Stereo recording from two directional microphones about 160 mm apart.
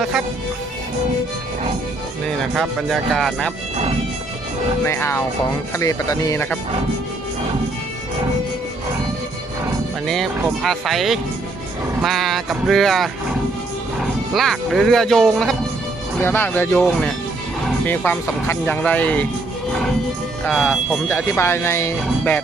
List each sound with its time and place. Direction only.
2.4 s speech: centre (ahead or behind)
4.9 s speech: 15° left (ahead or behind)
10.1 s speech: centre (ahead or behind)
16.2 s speech: 15° left (ahead or behind)
17.8 s speech: 10° left (ahead or behind)
20.4 s speech: centre (ahead or behind)